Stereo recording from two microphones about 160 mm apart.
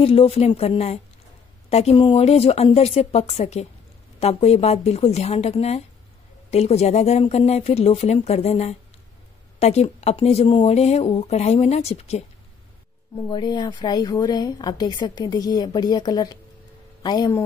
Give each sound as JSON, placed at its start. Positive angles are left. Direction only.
{"t": 0.0, "sound": "speech", "side_deg": 35}
{"t": 13.1, "sound": "a woman's voice", "side_deg": 30}